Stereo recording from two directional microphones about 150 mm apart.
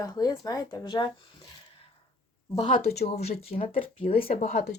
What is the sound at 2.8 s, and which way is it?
Speech, 45° left (ahead or behind).